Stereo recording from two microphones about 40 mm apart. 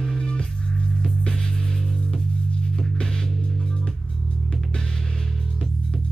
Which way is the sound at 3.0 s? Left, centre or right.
Centre.